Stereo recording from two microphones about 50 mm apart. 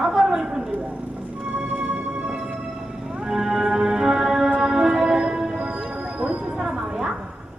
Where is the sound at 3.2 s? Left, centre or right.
Centre.